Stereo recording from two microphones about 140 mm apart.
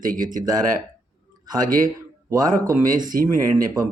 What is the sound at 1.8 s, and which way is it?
Speech, 25° right (ahead or behind).